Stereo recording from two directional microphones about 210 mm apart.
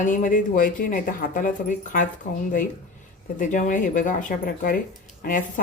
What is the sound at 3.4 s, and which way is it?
A woman's voice, 35° left (ahead or behind).